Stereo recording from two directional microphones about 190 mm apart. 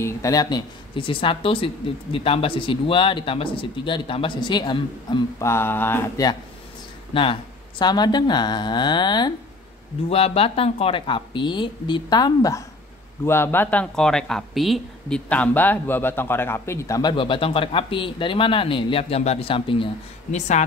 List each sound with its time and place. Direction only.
0.0 s speech: 15° left (ahead or behind)
5.5 s speech: 10° left (ahead or behind)
7.1 s speech: 30° left (ahead or behind)